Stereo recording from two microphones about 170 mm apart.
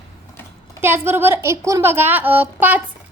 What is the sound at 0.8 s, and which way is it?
A woman's voice, 15° right (ahead or behind).